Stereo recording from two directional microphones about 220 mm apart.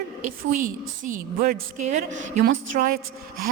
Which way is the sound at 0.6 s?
35° right (ahead or behind).